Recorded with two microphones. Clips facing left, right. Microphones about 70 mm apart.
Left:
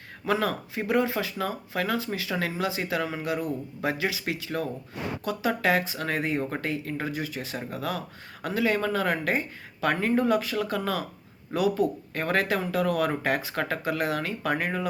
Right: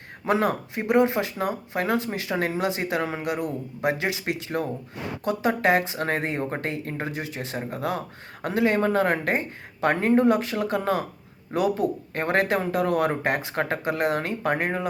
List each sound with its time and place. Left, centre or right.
0.3 s speech: right
1.9 s speech: right